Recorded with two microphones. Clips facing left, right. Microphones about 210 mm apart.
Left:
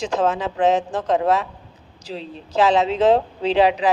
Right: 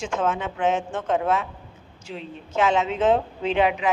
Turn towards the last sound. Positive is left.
turn(degrees=35)  # may be behind; listen again after turning